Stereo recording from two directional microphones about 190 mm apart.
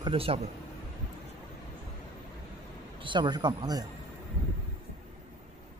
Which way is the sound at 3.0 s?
25° right (ahead or behind).